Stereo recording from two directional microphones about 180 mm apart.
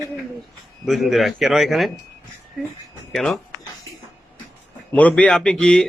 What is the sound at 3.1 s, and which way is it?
Speech, centre (ahead or behind).